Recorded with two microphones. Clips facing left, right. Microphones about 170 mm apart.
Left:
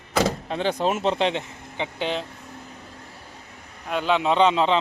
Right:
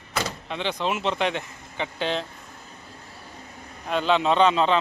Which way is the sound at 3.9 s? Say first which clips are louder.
Even; 10° left (ahead or behind).